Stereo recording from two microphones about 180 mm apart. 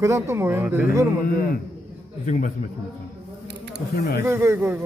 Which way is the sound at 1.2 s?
55° left (ahead or behind).